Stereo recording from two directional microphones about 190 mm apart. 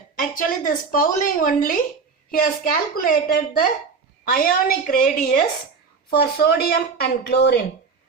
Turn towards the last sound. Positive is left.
turn(degrees=60)  # may be behind; listen again after turning